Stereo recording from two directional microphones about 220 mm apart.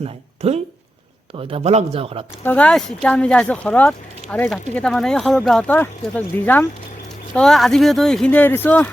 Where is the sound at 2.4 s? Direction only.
5° left (ahead or behind).